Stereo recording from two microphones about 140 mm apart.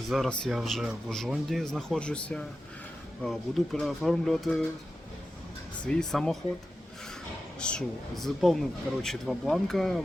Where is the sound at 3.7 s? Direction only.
Centre (ahead or behind).